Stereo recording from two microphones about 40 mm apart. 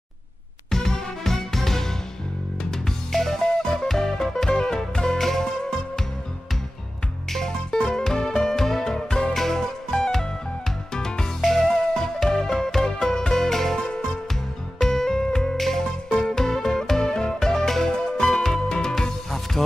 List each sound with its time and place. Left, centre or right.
0.7 s music: centre
3.1 s music: centre
7.3 s music: centre
9.8 s music: left
11.4 s music: centre